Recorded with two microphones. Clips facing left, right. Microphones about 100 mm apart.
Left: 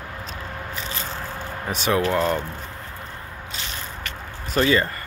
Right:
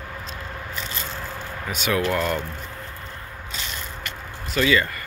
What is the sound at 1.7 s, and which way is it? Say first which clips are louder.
Speech: left 2 dB; 30° left (ahead or behind).